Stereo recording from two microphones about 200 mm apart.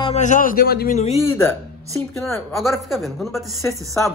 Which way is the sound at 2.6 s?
Centre (ahead or behind).